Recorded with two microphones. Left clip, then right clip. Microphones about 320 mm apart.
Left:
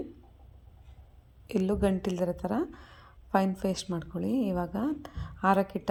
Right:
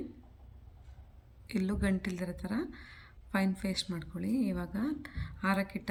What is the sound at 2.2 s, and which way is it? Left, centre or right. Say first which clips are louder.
A woman's voice: left 8 dB; left.